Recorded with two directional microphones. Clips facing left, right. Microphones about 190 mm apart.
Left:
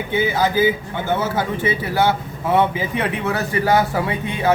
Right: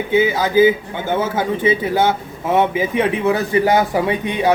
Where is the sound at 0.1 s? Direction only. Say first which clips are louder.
Right 3 dB; 10° right (ahead or behind).